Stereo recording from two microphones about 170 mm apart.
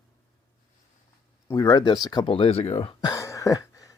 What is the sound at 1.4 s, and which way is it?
Speech, 20° left (ahead or behind).